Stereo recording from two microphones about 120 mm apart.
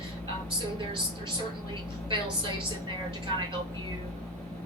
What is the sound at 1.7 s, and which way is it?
Speech, 45° right (ahead or behind).